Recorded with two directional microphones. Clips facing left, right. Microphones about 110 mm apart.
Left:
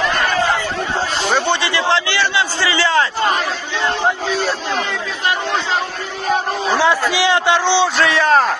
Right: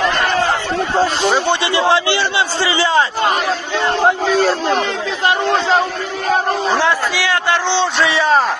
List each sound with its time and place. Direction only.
1.5 s a man's voice: 25° right (ahead or behind)
4.4 s speech: 40° right (ahead or behind)
7.2 s a man's voice: 20° left (ahead or behind)
8.0 s a man's voice: centre (ahead or behind)